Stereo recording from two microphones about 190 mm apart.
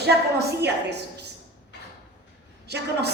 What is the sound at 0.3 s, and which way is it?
Speech, 60° right (ahead or behind).